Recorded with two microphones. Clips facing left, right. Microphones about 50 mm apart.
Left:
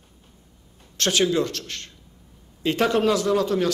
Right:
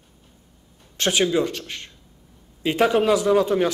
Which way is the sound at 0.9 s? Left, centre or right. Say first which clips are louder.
Right 1 dB; centre.